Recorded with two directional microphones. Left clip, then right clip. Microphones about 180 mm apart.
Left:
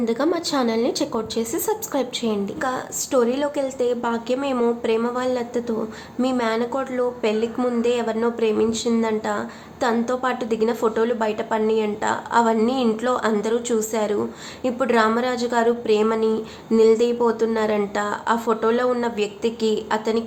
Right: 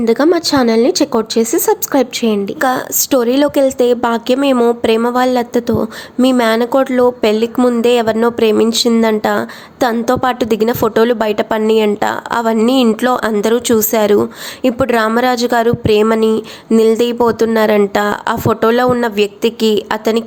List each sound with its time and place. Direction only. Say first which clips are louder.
0.0 s a woman's voice: right 10 dB; 40° right (ahead or behind)